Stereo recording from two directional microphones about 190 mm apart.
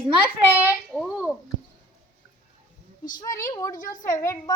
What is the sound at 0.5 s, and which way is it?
Speech, 5° right (ahead or behind).